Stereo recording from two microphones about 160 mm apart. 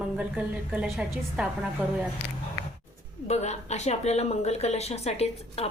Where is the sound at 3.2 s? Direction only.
45° left (ahead or behind).